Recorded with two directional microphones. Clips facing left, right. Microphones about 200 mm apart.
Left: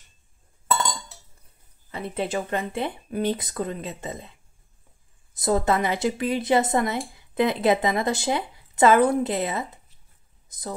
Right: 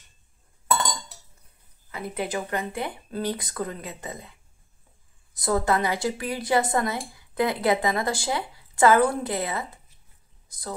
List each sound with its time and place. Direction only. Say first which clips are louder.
1.9 s speech: left 2 dB; 25° left (ahead or behind)